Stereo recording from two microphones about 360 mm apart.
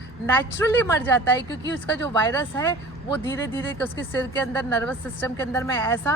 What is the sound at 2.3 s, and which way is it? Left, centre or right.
Speech, centre.